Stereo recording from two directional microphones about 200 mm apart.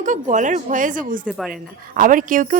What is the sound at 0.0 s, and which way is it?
A woman's voice, 40° right (ahead or behind).